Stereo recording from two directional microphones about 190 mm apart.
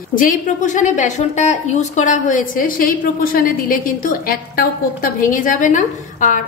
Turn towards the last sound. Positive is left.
turn(degrees=40)  # may be behind; listen again after turning